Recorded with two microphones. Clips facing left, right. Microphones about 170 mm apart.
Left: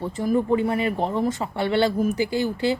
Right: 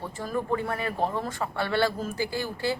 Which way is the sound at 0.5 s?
20° left (ahead or behind).